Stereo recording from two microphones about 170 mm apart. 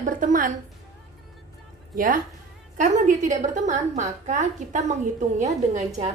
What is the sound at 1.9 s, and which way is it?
A woman's voice, 50° right (ahead or behind).